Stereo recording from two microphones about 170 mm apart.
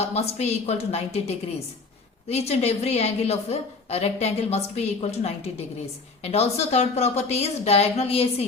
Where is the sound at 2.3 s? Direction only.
40° left (ahead or behind).